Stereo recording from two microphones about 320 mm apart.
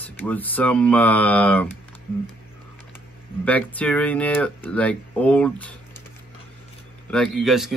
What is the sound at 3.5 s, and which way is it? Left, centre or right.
Speech, centre.